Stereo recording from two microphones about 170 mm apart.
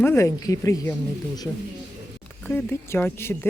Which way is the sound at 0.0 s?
15° left (ahead or behind).